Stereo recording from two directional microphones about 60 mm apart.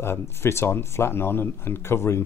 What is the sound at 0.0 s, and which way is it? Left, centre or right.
Speech, left.